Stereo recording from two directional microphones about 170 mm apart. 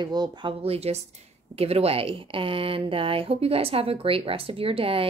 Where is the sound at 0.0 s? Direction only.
25° right (ahead or behind).